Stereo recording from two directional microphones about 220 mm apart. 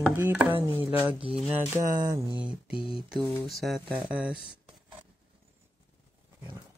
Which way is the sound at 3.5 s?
Centre (ahead or behind).